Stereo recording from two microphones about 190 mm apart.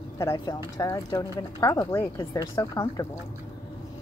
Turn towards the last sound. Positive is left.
turn(degrees=15)  # may be behind; listen again after turning